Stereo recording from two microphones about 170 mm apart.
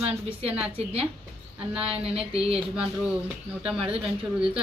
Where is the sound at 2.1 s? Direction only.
35° right (ahead or behind).